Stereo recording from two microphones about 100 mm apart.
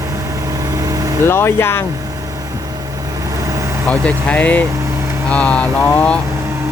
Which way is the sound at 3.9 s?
15° left (ahead or behind).